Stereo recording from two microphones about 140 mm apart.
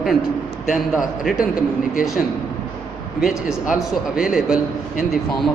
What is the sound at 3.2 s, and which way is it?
Speech, 5° right (ahead or behind).